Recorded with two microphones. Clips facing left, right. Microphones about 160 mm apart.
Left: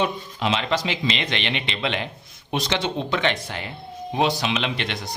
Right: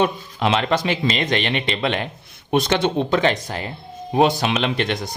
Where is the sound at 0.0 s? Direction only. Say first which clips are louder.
Right 4 dB; 55° right (ahead or behind).